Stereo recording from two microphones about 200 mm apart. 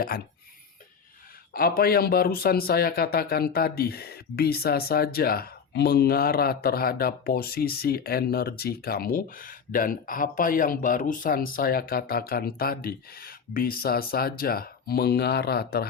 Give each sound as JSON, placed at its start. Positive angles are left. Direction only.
{"t": 1.5, "sound": "speech", "side_deg": 50}